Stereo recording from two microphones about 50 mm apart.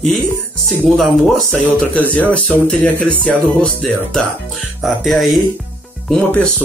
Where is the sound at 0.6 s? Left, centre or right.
Centre.